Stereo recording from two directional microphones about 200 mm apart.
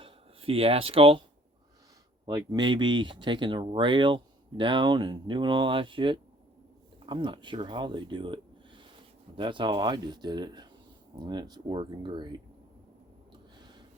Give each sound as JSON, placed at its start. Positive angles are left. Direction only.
{"t": 0.0, "sound": "speech", "side_deg": -30}
{"t": 2.2, "sound": "speech", "side_deg": -20}